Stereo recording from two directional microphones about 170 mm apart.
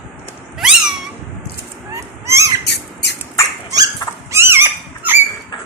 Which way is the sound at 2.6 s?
80° left.